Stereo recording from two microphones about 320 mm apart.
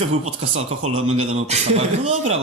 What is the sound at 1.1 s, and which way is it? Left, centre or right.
Speech, centre.